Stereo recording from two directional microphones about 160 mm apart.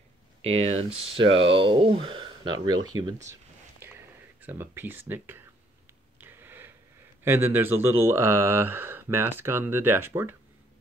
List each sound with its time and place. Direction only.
0.4 s speech: 40° right (ahead or behind)
3.8 s a sound: 10° right (ahead or behind)
7.2 s speech: 15° right (ahead or behind)